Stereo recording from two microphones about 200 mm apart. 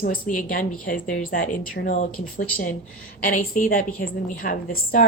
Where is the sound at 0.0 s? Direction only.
40° left (ahead or behind).